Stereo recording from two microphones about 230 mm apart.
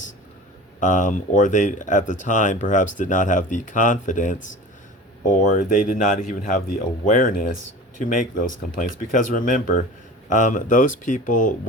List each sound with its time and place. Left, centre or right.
0.8 s speech: left